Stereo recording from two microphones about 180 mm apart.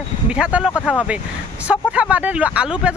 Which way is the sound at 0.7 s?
10° left (ahead or behind).